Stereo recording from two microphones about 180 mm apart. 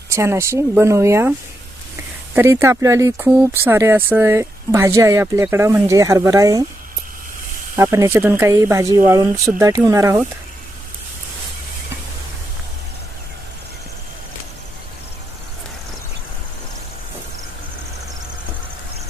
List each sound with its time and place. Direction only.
0.1 s speech: 15° right (ahead or behind)
2.3 s speech: 15° right (ahead or behind)
7.8 s speech: 15° right (ahead or behind)